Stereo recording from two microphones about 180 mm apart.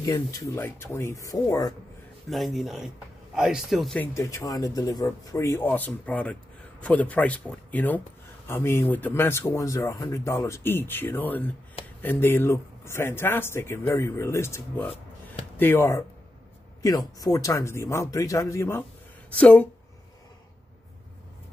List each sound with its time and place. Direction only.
0.0 s speech: 15° left (ahead or behind)
2.2 s a man's voice: centre (ahead or behind)